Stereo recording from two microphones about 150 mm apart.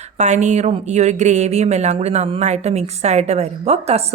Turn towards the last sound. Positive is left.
turn(degrees=-45)  # may be behind; listen again after turning